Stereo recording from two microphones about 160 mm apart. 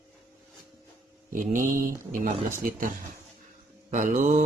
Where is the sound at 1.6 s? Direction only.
55° right (ahead or behind).